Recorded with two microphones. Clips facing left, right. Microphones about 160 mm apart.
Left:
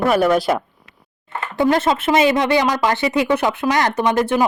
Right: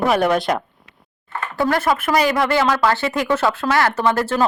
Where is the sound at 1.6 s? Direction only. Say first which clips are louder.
Left 2 dB; 20° left (ahead or behind).